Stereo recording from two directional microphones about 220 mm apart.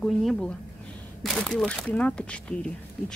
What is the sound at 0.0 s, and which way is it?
Speech, centre (ahead or behind).